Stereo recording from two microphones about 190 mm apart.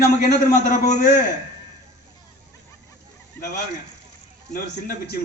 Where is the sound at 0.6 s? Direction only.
40° left (ahead or behind).